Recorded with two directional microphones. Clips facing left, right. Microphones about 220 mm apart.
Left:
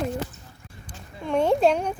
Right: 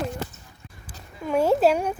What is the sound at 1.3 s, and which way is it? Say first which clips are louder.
Speech: right 1 dB; 5° right (ahead or behind).